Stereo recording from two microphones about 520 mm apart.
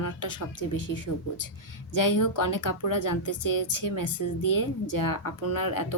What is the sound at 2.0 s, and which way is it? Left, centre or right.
A woman's voice, left.